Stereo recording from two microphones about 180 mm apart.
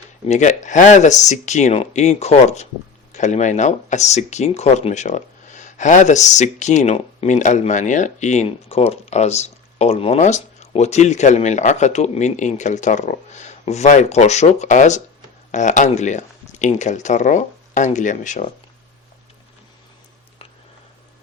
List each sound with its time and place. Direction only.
0.3 s speech: 40° left (ahead or behind)